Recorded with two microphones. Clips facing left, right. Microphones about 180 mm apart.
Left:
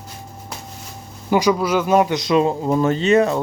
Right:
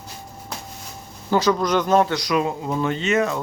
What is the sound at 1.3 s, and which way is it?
Speech, 10° left (ahead or behind).